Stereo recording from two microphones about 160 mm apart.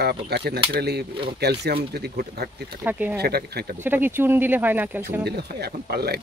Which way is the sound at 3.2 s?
80° right.